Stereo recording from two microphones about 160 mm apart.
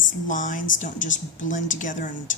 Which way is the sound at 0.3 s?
55° left (ahead or behind).